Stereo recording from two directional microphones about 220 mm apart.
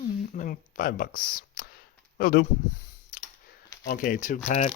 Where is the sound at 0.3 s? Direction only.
40° left (ahead or behind).